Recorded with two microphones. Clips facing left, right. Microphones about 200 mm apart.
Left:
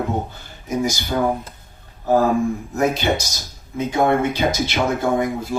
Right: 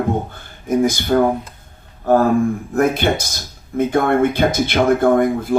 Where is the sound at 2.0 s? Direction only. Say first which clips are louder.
Right 3 dB; 55° right (ahead or behind).